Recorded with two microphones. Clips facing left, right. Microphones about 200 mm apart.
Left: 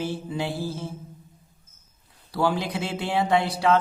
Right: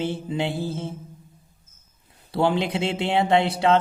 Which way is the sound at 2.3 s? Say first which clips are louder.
Right 3 dB; 25° right (ahead or behind).